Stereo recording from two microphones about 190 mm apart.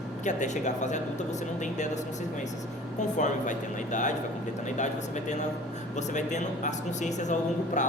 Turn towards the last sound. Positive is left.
turn(degrees=40)  # may be behind; listen again after turning